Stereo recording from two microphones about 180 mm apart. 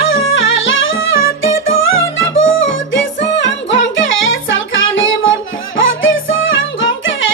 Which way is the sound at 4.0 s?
90° left.